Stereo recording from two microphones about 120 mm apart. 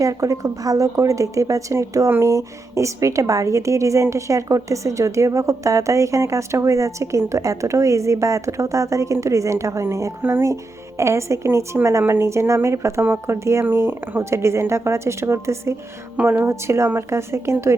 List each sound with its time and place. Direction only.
0.0 s speech: 25° right (ahead or behind)
16.1 s speech: 10° right (ahead or behind)
16.4 s speech: 20° right (ahead or behind)